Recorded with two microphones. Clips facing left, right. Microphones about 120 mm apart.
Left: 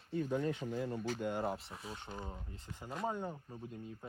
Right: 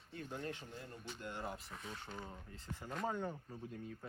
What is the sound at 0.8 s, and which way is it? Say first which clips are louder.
Speech: left 12 dB; 90° left.